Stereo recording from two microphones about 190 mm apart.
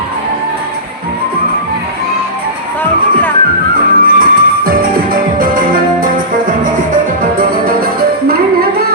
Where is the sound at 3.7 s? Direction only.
50° right (ahead or behind).